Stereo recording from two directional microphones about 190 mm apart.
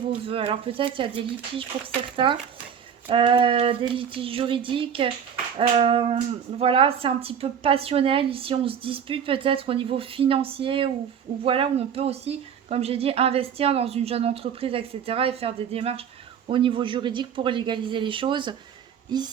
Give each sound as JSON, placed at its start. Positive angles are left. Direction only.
{"t": 0.1, "sound": "a woman's voice", "side_deg": -30}